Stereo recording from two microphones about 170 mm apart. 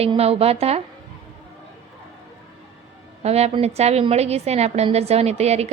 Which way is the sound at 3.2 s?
40° right (ahead or behind).